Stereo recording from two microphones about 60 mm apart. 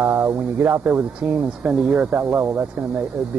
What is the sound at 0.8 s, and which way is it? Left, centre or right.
Speech, right.